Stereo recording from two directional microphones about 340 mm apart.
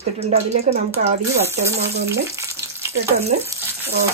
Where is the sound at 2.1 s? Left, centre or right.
Centre.